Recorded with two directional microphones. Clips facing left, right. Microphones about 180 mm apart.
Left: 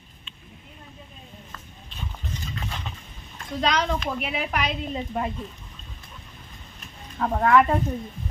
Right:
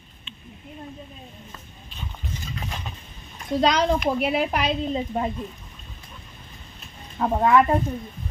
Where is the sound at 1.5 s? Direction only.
15° right (ahead or behind).